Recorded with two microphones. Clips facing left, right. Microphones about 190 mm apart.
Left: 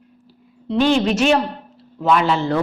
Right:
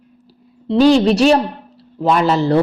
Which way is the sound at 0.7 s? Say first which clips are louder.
Right 5 dB; 35° right (ahead or behind).